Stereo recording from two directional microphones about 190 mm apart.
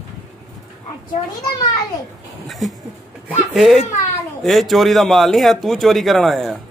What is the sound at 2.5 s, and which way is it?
A man's voice, centre (ahead or behind).